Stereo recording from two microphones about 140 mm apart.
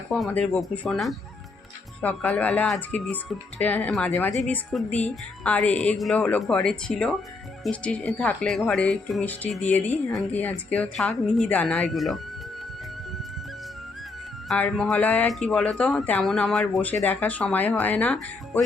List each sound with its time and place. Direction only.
0.1 s speech: 5° left (ahead or behind)
14.4 s speech: 5° left (ahead or behind)